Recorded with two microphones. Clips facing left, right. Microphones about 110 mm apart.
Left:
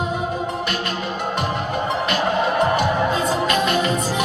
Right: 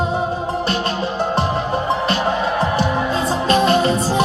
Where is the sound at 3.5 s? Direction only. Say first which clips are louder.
Right 5 dB; 35° right (ahead or behind).